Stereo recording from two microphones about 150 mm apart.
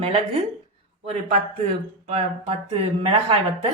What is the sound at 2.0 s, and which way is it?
Speech, 45° right (ahead or behind).